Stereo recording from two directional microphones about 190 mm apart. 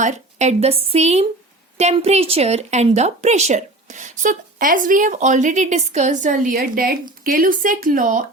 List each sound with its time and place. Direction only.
0.0 s a woman's voice: 35° right (ahead or behind)